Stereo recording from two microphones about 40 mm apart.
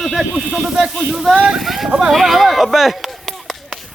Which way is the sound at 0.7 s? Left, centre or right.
Centre.